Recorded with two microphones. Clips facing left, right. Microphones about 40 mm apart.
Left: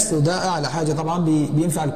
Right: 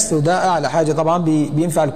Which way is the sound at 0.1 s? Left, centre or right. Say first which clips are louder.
Right 6 dB; right.